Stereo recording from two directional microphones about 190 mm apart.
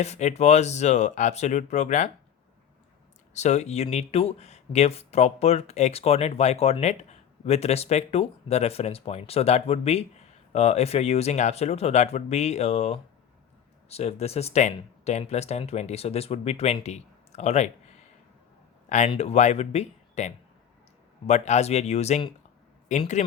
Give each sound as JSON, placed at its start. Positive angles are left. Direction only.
{"t": 0.0, "sound": "speech", "side_deg": 35}
{"t": 3.3, "sound": "speech", "side_deg": 35}
{"t": 18.9, "sound": "speech", "side_deg": 40}